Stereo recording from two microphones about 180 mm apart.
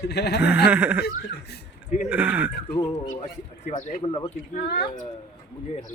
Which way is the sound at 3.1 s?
40° left (ahead or behind).